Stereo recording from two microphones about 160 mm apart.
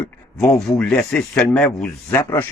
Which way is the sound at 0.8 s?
5° left (ahead or behind).